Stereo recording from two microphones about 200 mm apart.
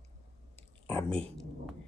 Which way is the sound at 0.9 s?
10° left (ahead or behind).